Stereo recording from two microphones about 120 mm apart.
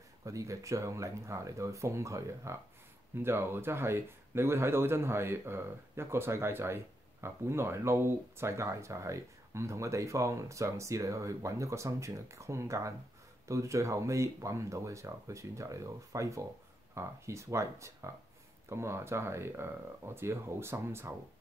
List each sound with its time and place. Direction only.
0.2 s speech: 25° right (ahead or behind)